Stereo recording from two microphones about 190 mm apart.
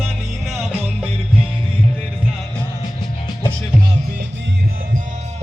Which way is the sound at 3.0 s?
20° left (ahead or behind).